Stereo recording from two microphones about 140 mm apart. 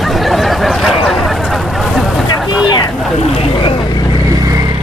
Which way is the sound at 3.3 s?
45° left (ahead or behind).